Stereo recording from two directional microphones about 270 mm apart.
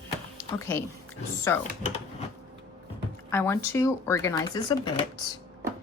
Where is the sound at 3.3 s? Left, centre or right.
Centre.